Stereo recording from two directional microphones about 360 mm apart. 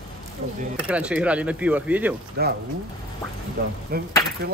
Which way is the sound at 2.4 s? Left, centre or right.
Right.